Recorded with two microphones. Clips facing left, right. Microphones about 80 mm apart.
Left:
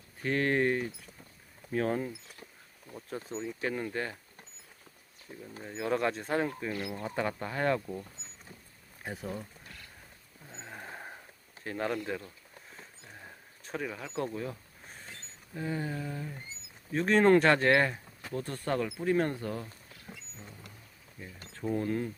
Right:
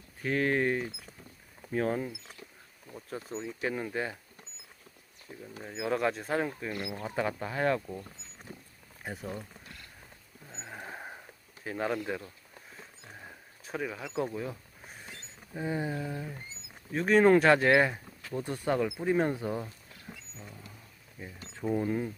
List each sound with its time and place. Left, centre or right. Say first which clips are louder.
0.2 s speech: even; centre
5.3 s speech: even; centre
9.0 s speech: even; centre
10.5 s a sound: right 1 dB; centre
10.8 s a sound: right 2 dB; centre
11.6 s speech: right 1 dB; centre
13.2 s a sound: right 1 dB; centre
15.5 s speech: right 2 dB; centre
21.2 s speech: right 2 dB; centre